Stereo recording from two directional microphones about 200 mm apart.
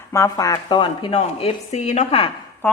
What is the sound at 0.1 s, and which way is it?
Speech, 15° left (ahead or behind).